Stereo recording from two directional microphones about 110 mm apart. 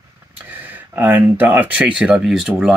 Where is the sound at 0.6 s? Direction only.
15° right (ahead or behind).